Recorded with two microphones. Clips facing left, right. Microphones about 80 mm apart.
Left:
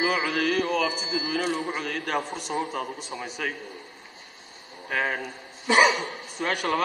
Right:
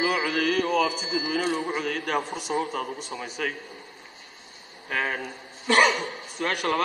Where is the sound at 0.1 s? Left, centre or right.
Centre.